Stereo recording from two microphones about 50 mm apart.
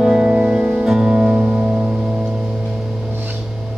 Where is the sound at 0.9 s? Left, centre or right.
Centre.